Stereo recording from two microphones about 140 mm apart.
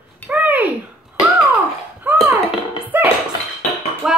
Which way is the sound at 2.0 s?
15° right (ahead or behind).